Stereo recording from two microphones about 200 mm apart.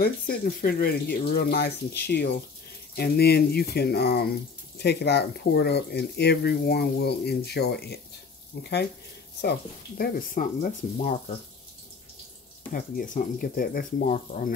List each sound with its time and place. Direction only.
0.0 s speech: 50° left (ahead or behind)
12.7 s speech: 45° left (ahead or behind)